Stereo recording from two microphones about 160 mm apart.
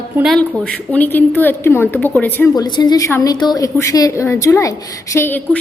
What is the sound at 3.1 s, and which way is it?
A woman's voice, 15° left (ahead or behind).